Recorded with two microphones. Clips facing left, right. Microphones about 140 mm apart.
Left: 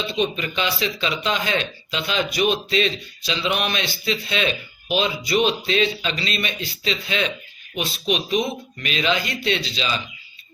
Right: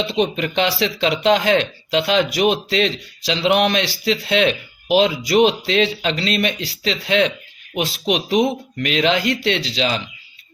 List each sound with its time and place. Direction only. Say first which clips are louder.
0.0 s speech: right 4 dB; 80° right
7.8 s speech: right 4 dB; 90° right